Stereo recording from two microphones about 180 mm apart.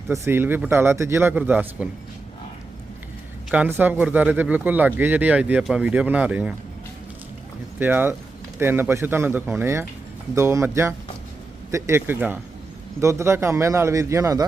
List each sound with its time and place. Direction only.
0.1 s speech: 10° right (ahead or behind)
3.5 s speech: 10° right (ahead or behind)
7.8 s speech: 10° right (ahead or behind)